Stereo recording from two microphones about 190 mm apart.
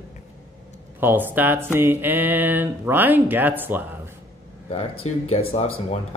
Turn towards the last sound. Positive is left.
turn(degrees=30)  # may be behind; listen again after turning